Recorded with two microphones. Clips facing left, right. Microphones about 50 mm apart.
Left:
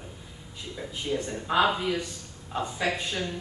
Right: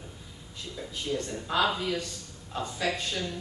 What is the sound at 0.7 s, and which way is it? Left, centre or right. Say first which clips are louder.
Speech: left 2 dB; centre.